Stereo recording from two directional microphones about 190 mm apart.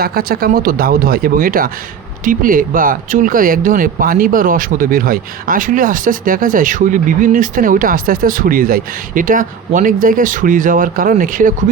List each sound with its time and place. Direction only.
0.0 s speech: 55° right (ahead or behind)